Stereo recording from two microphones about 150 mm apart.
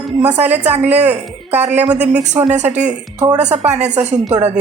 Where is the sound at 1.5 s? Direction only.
45° right (ahead or behind).